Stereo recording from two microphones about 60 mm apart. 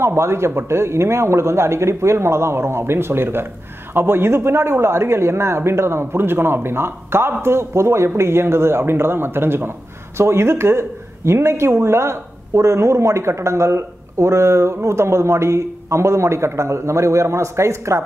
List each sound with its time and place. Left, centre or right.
0.0 s speech: right